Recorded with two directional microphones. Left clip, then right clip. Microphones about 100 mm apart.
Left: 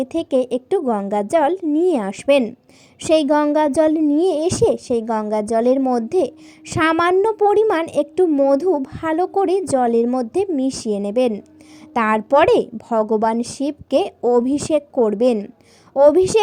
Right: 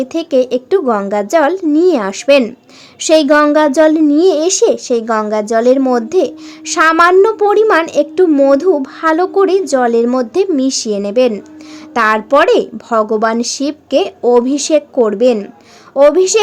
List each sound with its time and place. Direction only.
0.0 s a woman's voice: 50° left (ahead or behind)
15.0 s a woman's voice: 50° left (ahead or behind)